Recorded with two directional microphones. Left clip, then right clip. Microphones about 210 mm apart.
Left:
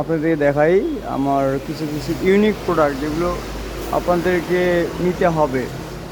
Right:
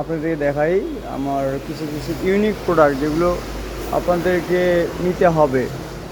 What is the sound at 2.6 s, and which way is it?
Speech, centre (ahead or behind).